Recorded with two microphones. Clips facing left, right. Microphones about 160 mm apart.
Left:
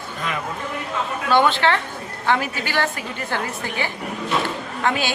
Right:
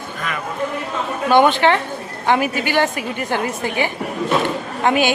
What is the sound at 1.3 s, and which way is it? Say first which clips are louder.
A woman's voice: right 4 dB; 15° right (ahead or behind).